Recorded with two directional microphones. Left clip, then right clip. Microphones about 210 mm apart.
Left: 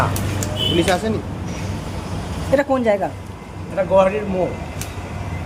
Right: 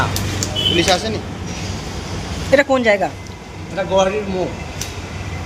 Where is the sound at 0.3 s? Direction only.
40° left (ahead or behind).